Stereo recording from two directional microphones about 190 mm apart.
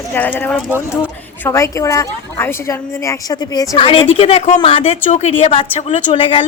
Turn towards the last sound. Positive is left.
turn(degrees=30)  # may be behind; listen again after turning